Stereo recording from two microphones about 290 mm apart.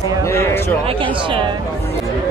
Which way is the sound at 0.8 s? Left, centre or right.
Centre.